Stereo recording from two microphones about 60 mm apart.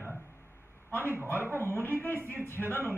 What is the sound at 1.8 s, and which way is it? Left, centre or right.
Speech, left.